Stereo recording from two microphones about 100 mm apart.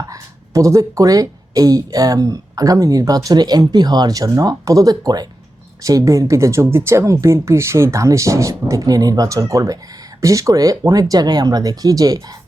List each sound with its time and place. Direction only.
0.1 s speech: 30° right (ahead or behind)